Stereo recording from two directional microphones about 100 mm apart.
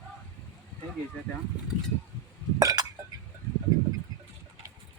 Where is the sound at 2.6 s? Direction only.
35° right (ahead or behind).